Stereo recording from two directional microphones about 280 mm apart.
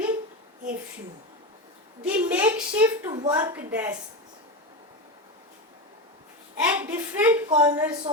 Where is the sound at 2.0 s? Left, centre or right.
Centre.